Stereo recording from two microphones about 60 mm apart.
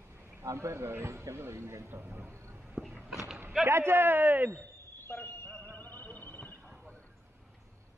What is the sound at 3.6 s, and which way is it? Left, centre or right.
Speech, right.